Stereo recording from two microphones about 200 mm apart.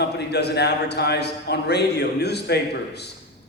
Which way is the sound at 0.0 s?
55° left (ahead or behind).